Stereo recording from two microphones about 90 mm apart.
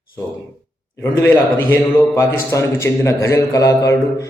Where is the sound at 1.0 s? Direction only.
25° left (ahead or behind).